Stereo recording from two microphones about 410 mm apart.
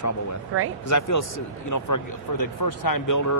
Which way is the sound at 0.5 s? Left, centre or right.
Right.